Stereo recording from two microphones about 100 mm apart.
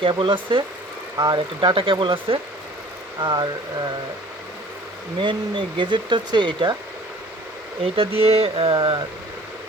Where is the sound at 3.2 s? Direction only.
50° right (ahead or behind).